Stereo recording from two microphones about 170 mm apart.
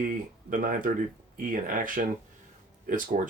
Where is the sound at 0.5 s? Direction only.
55° right (ahead or behind).